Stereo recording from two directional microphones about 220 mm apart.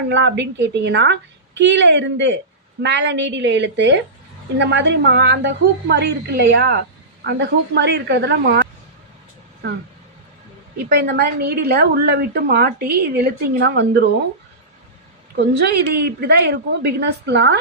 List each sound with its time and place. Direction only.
0.1 s a woman's voice: 55° right (ahead or behind)
10.9 s a woman's voice: 45° right (ahead or behind)
15.4 s a woman's voice: 50° right (ahead or behind)